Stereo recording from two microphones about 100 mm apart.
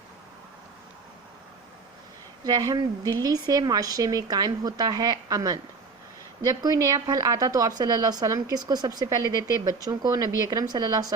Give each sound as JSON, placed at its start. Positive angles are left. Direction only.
{"t": 2.4, "sound": "speech", "side_deg": -40}